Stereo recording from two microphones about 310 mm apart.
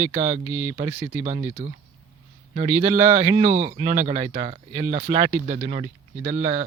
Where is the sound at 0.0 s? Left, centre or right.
Right.